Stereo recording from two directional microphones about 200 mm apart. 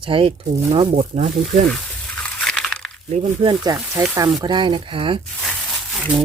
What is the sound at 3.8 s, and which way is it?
Speech, 5° right (ahead or behind).